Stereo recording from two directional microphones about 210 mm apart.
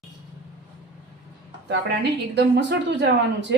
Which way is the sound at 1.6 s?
55° right (ahead or behind).